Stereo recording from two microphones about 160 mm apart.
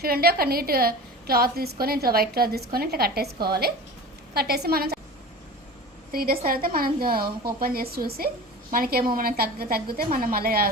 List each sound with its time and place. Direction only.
0.0 s a woman's voice: 70° right (ahead or behind)
6.1 s a woman's voice: 65° right (ahead or behind)